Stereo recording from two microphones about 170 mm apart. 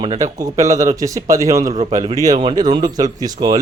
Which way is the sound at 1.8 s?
40° right (ahead or behind).